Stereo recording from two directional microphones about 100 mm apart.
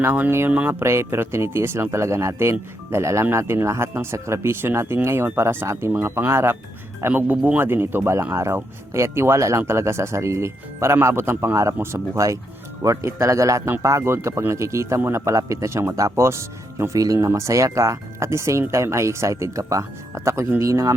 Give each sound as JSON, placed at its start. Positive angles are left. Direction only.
{"t": 0.0, "sound": "speech", "side_deg": -20}